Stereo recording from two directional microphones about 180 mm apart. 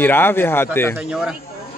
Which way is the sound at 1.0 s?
5° right (ahead or behind).